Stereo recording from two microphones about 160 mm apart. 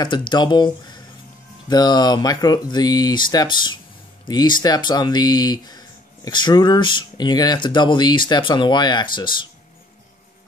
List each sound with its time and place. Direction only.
0.0 s speech: 30° left (ahead or behind)